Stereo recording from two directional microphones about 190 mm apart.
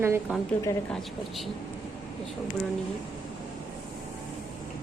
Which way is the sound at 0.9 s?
Centre (ahead or behind).